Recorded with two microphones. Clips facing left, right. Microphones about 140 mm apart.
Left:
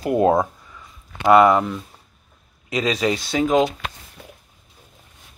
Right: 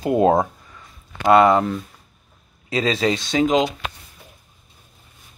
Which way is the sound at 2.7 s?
30° right (ahead or behind).